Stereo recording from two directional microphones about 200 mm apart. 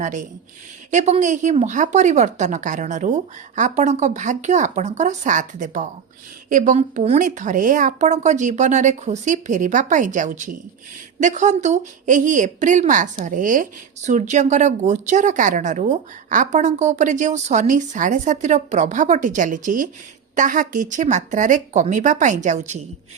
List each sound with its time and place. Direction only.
0.0 s speech: 40° right (ahead or behind)